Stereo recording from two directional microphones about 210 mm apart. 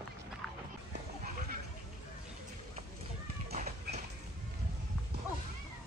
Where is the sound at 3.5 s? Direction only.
35° right (ahead or behind).